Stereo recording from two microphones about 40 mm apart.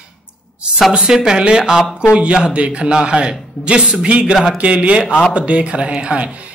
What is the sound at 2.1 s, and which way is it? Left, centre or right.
A man's voice, right.